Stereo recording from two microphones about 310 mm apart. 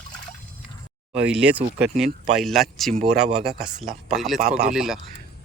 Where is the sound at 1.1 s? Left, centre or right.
Centre.